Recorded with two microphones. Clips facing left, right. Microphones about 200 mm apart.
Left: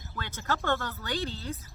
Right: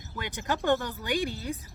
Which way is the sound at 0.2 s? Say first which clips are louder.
Right 2 dB; 15° right (ahead or behind).